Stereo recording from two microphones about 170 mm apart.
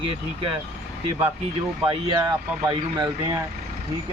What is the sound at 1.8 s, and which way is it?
Speech, 25° right (ahead or behind).